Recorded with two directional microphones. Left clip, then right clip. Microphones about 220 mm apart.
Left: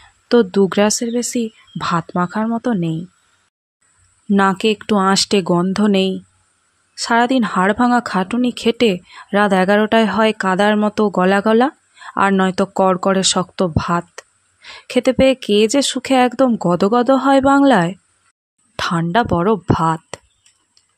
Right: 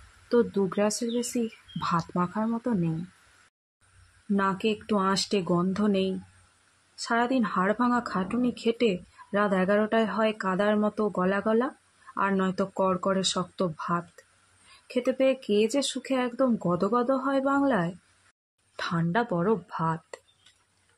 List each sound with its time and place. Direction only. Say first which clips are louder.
0.3 s speech: left 11 dB; 35° left (ahead or behind)
4.3 s speech: left 12 dB; 45° left (ahead or behind)